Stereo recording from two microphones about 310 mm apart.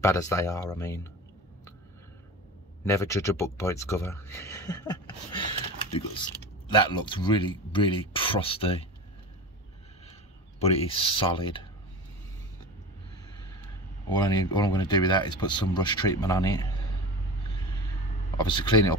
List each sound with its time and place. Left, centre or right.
0.0 s speech: centre
2.8 s speech: centre
10.6 s speech: centre
14.1 s speech: centre
18.4 s speech: centre